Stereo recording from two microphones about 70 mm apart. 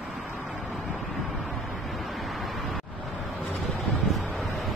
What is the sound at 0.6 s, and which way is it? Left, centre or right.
Vehicle, centre.